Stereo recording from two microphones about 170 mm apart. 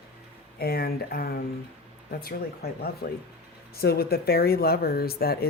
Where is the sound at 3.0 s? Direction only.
70° left (ahead or behind).